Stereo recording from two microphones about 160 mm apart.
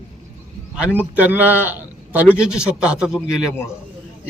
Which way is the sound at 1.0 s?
10° right (ahead or behind).